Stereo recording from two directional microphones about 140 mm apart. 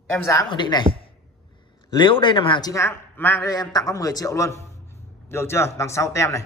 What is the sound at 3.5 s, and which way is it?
A man's voice, 25° left (ahead or behind).